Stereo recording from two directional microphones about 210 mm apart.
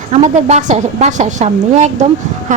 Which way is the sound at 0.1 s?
30° right (ahead or behind).